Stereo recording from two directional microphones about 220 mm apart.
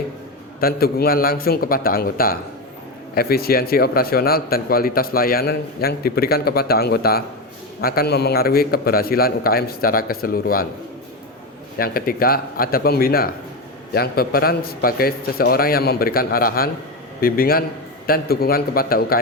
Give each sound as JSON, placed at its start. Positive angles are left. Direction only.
{"t": 0.6, "sound": "a man's voice", "side_deg": 45}
{"t": 11.8, "sound": "a man's voice", "side_deg": 40}